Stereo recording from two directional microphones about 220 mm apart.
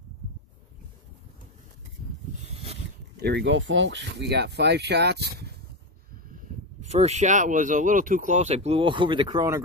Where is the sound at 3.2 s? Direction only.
50° right (ahead or behind).